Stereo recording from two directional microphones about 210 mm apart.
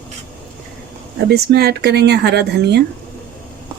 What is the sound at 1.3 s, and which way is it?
Speech, 50° right (ahead or behind).